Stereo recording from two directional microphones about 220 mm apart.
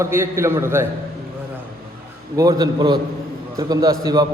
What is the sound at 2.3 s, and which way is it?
A man's voice, 15° right (ahead or behind).